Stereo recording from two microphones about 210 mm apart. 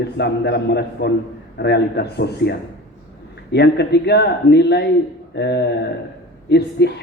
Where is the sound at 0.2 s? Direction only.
50° left (ahead or behind).